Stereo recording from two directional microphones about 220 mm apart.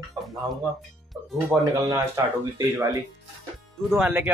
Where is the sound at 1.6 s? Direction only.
15° right (ahead or behind).